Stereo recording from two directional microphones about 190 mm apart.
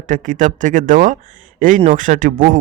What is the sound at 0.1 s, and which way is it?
A man's voice, 40° right (ahead or behind).